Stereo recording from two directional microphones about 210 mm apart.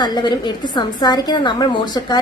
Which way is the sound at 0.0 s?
20° left (ahead or behind).